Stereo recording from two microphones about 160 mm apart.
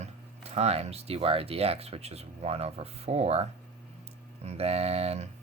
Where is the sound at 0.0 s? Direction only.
40° right (ahead or behind).